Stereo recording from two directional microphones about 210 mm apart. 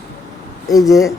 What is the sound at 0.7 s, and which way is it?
Speech, 15° left (ahead or behind).